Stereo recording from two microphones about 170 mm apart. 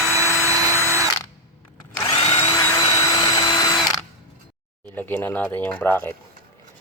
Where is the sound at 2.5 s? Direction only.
20° left (ahead or behind).